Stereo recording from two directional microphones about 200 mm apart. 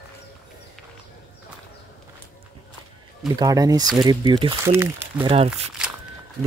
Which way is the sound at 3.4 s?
20° right (ahead or behind).